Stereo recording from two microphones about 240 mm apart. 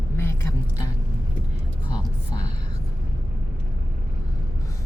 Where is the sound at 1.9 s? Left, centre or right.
Centre.